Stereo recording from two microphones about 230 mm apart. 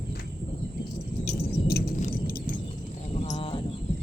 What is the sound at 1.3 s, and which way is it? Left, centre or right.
Keys jangling, left.